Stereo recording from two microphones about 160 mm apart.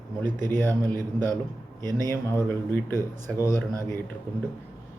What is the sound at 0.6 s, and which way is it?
Speech, 15° left (ahead or behind).